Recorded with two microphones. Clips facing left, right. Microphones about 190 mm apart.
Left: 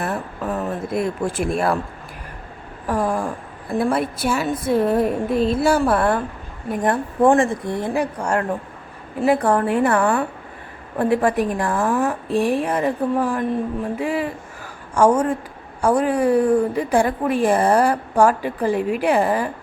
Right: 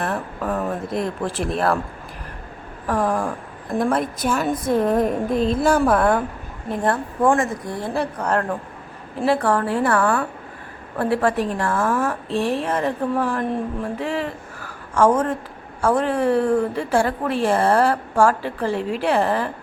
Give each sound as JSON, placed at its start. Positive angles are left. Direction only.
{"t": 0.0, "sound": "a woman's voice", "side_deg": 5}
{"t": 2.8, "sound": "a woman's voice", "side_deg": 10}
{"t": 6.7, "sound": "a woman's voice", "side_deg": 15}
{"t": 7.2, "sound": "a woman's voice", "side_deg": 25}
{"t": 7.9, "sound": "a woman's voice", "side_deg": 10}